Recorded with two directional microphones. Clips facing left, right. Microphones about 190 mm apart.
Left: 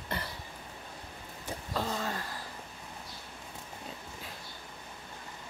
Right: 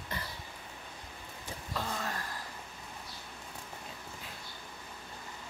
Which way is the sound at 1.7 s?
25° left (ahead or behind).